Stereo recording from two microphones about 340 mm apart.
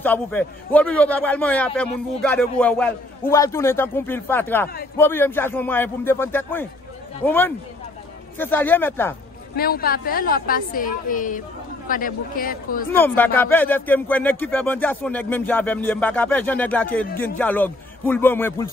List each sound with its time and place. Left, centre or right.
0.0 s a man's voice: centre
9.6 s a woman's voice: left
12.9 s a man's voice: centre